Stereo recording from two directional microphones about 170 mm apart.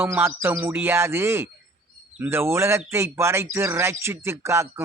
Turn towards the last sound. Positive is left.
turn(degrees=-15)  # may be behind; listen again after turning